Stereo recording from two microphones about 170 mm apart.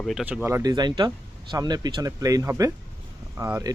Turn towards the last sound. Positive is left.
turn(degrees=-15)  # may be behind; listen again after turning